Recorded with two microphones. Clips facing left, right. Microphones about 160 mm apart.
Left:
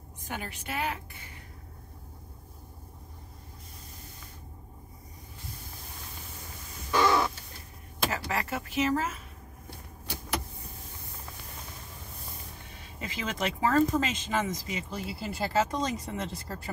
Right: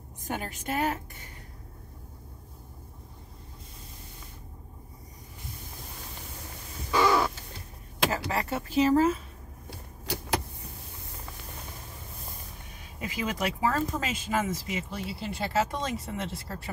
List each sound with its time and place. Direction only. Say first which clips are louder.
0.3 s a woman's voice: right 4 dB; 45° right (ahead or behind)
6.9 s crow: right 1 dB; 10° right (ahead or behind)
8.1 s speech: right 2 dB; 30° right (ahead or behind)
13.0 s speech: right 2 dB; 10° right (ahead or behind)